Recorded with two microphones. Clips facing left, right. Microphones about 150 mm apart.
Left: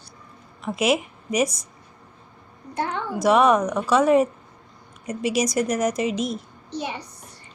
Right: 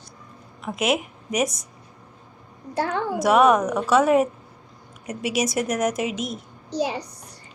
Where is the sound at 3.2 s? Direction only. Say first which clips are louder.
Even; centre (ahead or behind).